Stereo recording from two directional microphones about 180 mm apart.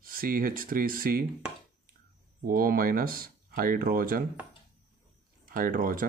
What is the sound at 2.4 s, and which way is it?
Speech, 55° right (ahead or behind).